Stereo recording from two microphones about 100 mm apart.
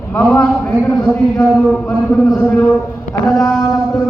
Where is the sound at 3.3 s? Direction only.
5° left (ahead or behind).